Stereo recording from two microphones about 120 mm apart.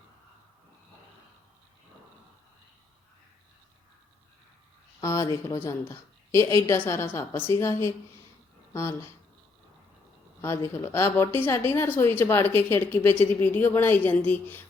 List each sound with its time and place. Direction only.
4.9 s a woman's voice: 25° left (ahead or behind)
10.4 s a woman's voice: 20° left (ahead or behind)